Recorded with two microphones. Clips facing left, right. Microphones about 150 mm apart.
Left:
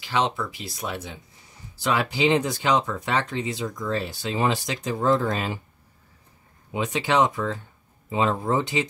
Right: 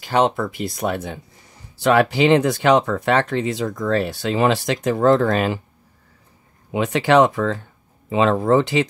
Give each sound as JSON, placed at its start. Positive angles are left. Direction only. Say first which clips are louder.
{"t": 0.0, "sound": "speech", "louder": "right 7 dB", "side_deg": -50}
{"t": 6.7, "sound": "speech", "louder": "right 7 dB", "side_deg": -65}
{"t": 8.1, "sound": "speech", "louder": "right 7 dB", "side_deg": -80}